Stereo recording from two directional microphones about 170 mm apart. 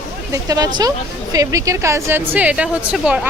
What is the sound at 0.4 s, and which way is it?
A woman's voice, 20° right (ahead or behind).